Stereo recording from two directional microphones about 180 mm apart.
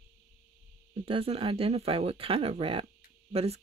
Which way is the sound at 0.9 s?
30° right (ahead or behind).